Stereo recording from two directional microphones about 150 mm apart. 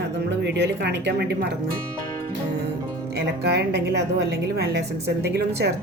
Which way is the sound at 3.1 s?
90° right.